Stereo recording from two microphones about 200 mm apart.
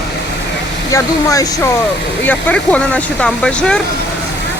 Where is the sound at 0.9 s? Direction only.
15° left (ahead or behind).